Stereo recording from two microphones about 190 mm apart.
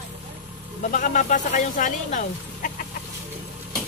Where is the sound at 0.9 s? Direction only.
40° left (ahead or behind).